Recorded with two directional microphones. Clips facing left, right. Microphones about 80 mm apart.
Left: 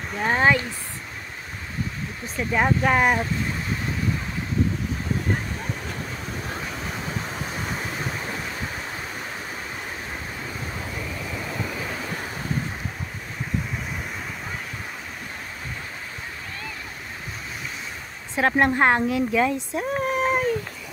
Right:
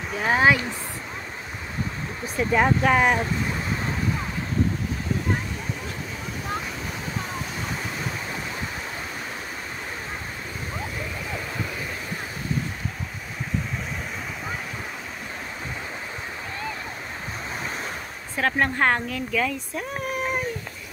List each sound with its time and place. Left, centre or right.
0.1 s speech: centre
2.2 s speech: centre
18.3 s speech: left